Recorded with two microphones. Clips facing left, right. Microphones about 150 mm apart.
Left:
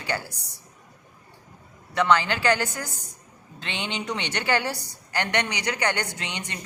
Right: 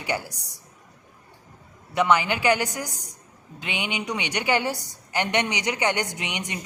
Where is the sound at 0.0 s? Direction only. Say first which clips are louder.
Right 2 dB; 15° right (ahead or behind).